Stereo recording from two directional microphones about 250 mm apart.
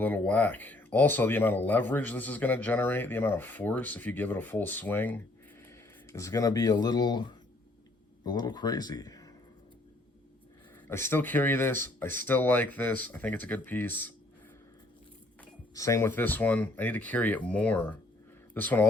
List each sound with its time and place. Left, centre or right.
0.0 s speech: centre
10.8 s speech: centre
15.7 s speech: centre